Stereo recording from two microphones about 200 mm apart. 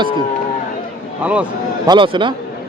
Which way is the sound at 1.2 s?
5° right (ahead or behind).